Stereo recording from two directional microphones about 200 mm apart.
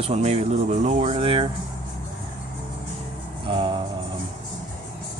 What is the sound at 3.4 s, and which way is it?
Music, 25° right (ahead or behind).